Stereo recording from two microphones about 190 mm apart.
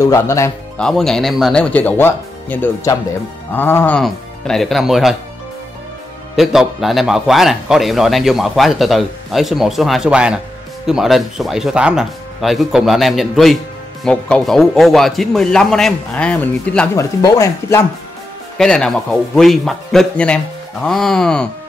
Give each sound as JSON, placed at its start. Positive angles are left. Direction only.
{"t": 0.0, "sound": "speech", "side_deg": 15}
{"t": 0.7, "sound": "speech", "side_deg": 5}
{"t": 6.3, "sound": "speech", "side_deg": 0}
{"t": 18.6, "sound": "speech", "side_deg": 5}